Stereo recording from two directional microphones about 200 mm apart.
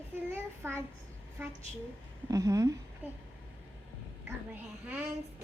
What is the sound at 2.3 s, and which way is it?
Speech, 15° right (ahead or behind).